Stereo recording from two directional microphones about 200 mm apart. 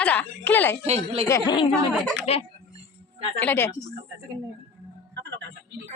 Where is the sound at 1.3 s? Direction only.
20° left (ahead or behind).